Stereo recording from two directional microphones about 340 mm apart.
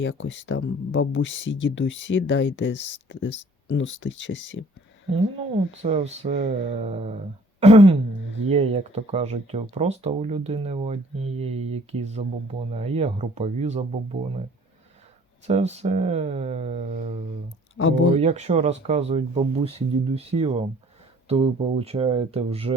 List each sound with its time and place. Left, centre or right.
0.0 s speech: left
5.4 s speech: centre
15.4 s speech: centre
18.1 s speech: centre